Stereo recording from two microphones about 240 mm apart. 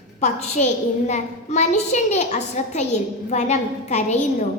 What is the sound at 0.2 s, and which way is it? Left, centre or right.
A woman's voice, left.